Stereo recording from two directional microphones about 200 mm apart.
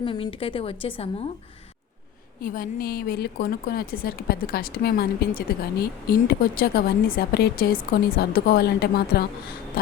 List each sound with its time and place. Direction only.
0.0 s a woman's voice: 25° left (ahead or behind)
2.4 s a woman's voice: 45° left (ahead or behind)
9.8 s a sound: 45° left (ahead or behind)